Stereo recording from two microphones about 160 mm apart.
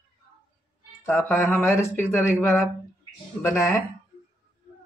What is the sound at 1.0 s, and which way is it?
Speech, 15° left (ahead or behind).